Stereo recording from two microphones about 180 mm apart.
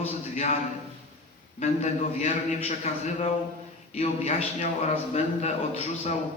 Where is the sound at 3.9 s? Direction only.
35° left (ahead or behind).